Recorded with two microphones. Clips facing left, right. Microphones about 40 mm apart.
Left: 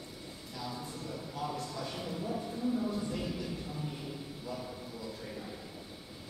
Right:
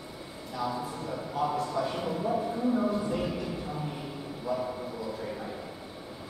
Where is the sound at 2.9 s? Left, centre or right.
Centre.